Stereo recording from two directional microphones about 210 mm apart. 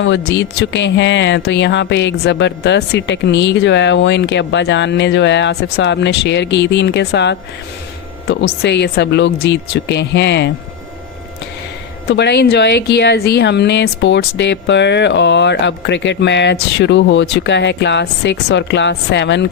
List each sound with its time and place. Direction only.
0.0 s speech: 60° left (ahead or behind)
8.6 s speech: 55° left (ahead or behind)
12.1 s speech: 55° left (ahead or behind)